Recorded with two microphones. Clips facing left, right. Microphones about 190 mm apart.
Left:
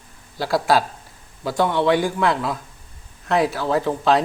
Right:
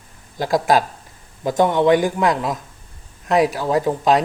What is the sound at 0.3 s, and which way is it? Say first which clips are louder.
Speech: right 2 dB; 15° right (ahead or behind).